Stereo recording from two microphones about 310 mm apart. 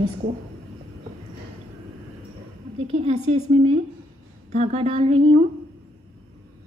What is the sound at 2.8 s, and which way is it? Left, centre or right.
A woman's voice, centre.